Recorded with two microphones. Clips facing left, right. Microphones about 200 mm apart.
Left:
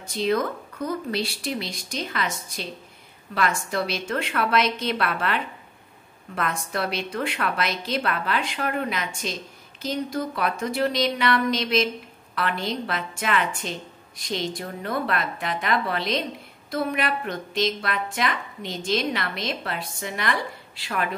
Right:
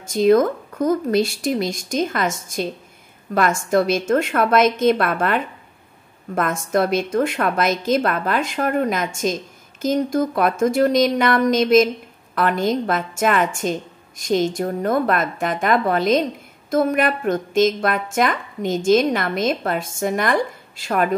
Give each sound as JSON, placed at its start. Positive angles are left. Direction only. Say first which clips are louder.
{"t": 0.0, "sound": "a woman's voice", "louder": "right 9 dB", "side_deg": -45}